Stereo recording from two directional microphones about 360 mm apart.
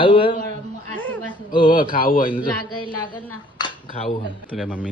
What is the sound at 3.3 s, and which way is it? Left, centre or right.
Dishes, centre.